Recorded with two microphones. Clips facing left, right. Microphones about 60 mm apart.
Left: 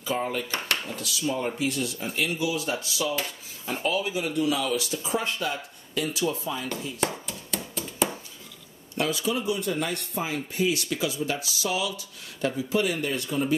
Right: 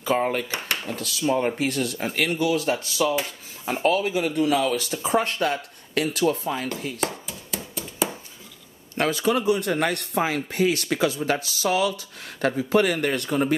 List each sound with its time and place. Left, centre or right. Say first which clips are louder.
0.0 s speech: right 5 dB; right
7.2 s a sound: even; centre
8.9 s speech: right 5 dB; right